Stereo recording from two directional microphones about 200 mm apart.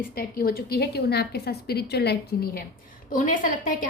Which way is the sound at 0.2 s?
45° left (ahead or behind).